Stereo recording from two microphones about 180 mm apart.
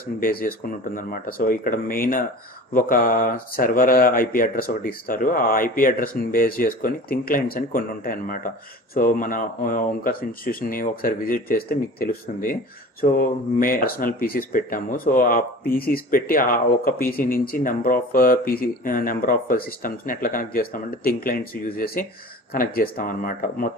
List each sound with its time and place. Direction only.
0.2 s speech: 55° left (ahead or behind)